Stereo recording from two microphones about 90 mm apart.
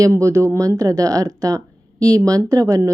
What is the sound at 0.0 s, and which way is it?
Speech, 35° right (ahead or behind).